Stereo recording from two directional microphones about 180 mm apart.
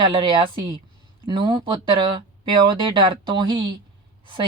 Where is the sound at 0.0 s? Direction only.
25° right (ahead or behind).